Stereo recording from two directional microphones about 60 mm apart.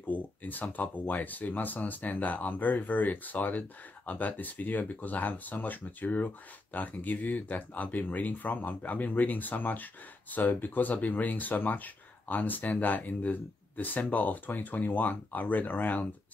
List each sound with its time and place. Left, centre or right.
0.0 s speech: left